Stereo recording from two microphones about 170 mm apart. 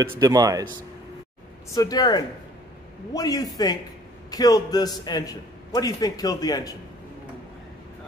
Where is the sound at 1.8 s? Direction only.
25° left (ahead or behind).